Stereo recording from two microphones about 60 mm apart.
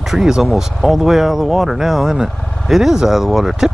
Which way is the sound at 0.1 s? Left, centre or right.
Centre.